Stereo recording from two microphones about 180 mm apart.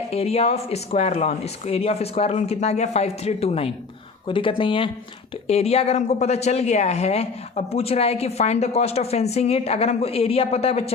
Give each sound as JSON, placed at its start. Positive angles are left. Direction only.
{"t": 0.1, "sound": "speech", "side_deg": 35}